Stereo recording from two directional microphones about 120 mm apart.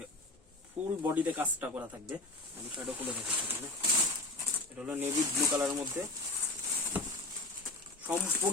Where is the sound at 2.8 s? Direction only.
15° right (ahead or behind).